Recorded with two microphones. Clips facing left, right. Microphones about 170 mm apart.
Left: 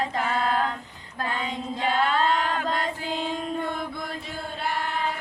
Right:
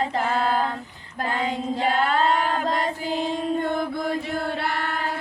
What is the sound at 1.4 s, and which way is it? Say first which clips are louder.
Choir: right 8 dB; 40° right (ahead or behind).